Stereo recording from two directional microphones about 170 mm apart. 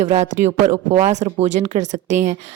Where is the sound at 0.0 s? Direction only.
40° right (ahead or behind).